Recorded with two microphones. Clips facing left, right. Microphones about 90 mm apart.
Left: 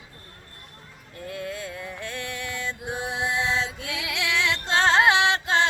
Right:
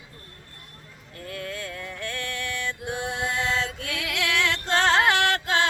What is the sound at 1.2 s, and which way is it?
Music, 15° left (ahead or behind).